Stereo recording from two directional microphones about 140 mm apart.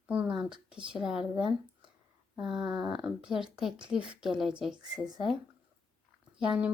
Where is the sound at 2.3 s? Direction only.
35° right (ahead or behind).